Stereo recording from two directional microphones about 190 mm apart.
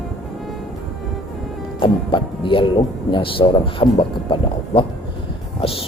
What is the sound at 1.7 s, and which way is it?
Music, 25° left (ahead or behind).